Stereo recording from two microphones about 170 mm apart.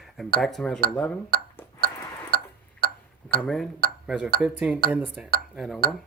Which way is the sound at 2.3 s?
65° right (ahead or behind).